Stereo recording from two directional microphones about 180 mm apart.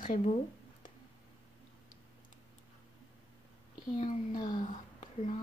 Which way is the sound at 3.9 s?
45° left (ahead or behind).